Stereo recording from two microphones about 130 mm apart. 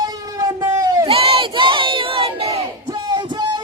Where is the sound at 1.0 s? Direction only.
50° right (ahead or behind).